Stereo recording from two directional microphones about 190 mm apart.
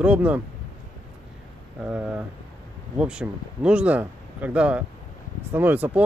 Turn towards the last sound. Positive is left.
turn(degrees=-10)  # may be behind; listen again after turning